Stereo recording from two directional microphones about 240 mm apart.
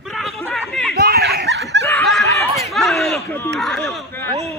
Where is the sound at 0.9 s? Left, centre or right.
Right.